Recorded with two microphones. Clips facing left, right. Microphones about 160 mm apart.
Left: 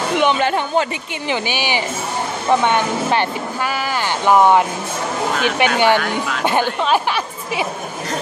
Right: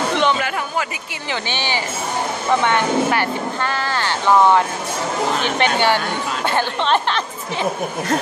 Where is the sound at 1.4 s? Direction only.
10° left (ahead or behind).